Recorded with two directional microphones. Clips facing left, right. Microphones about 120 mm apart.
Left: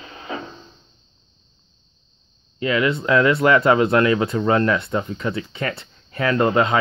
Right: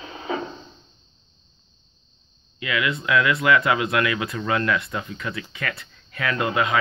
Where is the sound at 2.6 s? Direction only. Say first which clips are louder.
Left 6 dB; 35° left (ahead or behind).